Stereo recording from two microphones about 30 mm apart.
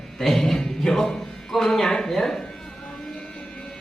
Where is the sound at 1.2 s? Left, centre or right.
Centre.